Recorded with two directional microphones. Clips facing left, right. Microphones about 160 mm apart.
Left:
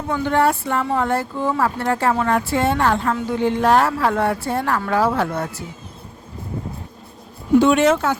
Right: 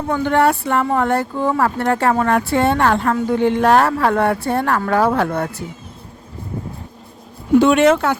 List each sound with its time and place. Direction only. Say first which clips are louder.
0.1 s speech: right 2 dB; 60° right (ahead or behind)
7.6 s speech: right 4 dB; 65° right (ahead or behind)